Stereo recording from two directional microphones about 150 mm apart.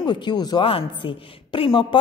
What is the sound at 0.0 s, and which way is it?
A woman's voice, 30° left (ahead or behind).